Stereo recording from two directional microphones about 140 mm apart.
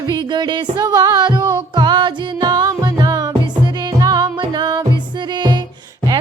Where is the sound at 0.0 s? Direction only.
30° right (ahead or behind).